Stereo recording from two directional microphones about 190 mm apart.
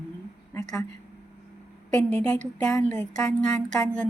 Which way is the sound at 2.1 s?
10° left (ahead or behind).